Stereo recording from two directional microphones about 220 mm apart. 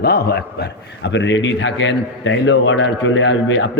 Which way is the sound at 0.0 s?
45° left (ahead or behind).